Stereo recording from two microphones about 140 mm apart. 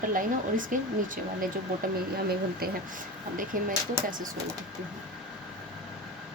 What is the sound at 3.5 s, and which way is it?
Speech, 70° right (ahead or behind).